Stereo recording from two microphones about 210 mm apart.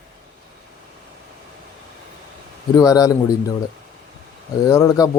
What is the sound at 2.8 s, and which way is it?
Speech, 15° left (ahead or behind).